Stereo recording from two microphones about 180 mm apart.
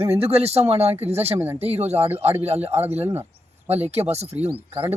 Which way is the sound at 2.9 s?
35° right (ahead or behind).